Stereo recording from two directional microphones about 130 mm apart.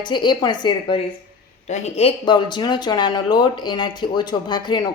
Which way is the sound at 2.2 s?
35° left (ahead or behind).